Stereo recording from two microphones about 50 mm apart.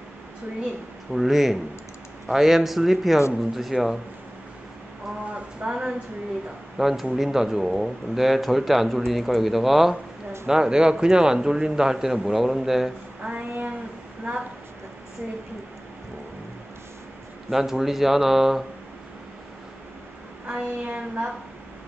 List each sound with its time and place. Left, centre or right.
1.1 s speech: centre
5.3 s speech: centre
10.5 s a man's voice: centre
13.2 s child singing: right
17.5 s speech: centre
20.4 s a woman's voice: centre
20.9 s a woman's voice: right